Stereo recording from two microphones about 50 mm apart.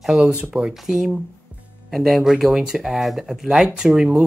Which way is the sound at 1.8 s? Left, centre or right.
Centre.